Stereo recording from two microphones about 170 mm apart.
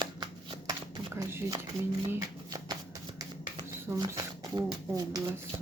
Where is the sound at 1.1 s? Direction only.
15° right (ahead or behind).